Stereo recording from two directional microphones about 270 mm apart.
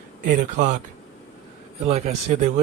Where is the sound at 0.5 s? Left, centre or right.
Right.